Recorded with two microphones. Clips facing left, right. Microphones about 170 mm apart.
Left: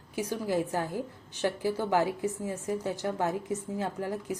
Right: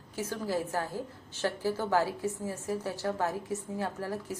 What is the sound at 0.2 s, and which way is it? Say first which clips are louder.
A woman's voice: left 3 dB; 15° left (ahead or behind).